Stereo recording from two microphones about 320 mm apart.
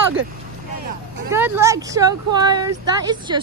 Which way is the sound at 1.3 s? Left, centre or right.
Centre.